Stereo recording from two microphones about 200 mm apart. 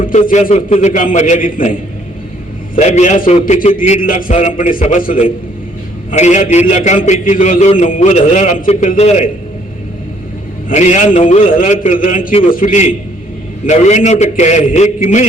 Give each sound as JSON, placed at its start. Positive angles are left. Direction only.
{"t": 0.0, "sound": "a man's voice", "side_deg": 40}
{"t": 2.7, "sound": "a man's voice", "side_deg": 35}
{"t": 10.7, "sound": "a man's voice", "side_deg": 35}